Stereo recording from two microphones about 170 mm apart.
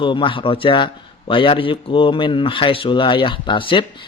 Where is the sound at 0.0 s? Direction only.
30° left (ahead or behind).